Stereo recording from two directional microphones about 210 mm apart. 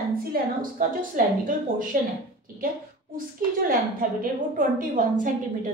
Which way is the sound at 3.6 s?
40° right (ahead or behind).